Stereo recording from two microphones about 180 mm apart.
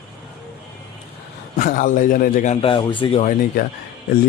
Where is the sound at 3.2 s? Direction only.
45° left (ahead or behind).